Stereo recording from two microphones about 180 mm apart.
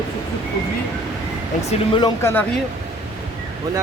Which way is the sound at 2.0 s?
15° left (ahead or behind).